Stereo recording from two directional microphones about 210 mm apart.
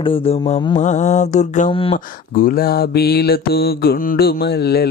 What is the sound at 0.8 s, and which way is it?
Speech, 35° left (ahead or behind).